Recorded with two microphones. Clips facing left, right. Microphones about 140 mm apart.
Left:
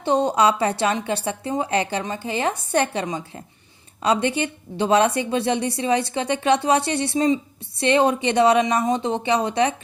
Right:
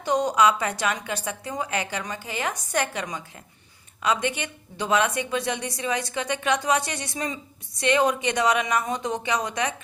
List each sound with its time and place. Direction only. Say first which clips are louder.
0.0 s a woman's voice: left 3 dB; 30° left (ahead or behind)